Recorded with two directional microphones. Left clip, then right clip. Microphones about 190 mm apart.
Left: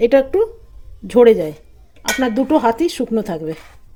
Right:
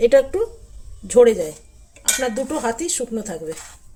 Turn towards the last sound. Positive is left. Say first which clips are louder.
# left 6 dB
turn(degrees=35)  # may be behind; listen again after turning